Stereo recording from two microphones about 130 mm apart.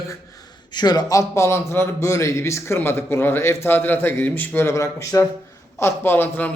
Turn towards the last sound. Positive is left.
turn(degrees=15)  # may be behind; listen again after turning